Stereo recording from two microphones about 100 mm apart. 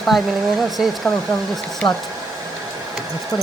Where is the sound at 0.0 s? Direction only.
Centre (ahead or behind).